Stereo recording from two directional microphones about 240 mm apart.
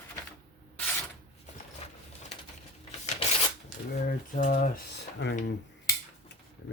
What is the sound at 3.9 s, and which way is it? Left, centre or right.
Speech, left.